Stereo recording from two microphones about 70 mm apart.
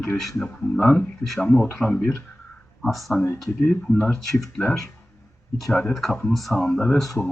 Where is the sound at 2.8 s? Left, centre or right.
Centre.